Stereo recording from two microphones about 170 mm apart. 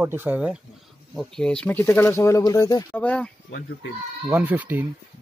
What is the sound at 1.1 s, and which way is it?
Speech, 5° left (ahead or behind).